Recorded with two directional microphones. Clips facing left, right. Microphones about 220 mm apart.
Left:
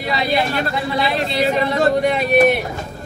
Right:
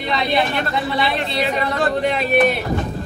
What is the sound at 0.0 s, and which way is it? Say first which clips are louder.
Speech: even; 5° left (ahead or behind).